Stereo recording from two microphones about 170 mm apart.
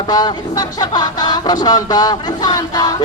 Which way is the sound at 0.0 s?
25° left (ahead or behind).